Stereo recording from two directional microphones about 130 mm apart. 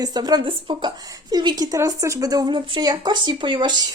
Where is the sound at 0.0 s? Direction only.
30° right (ahead or behind).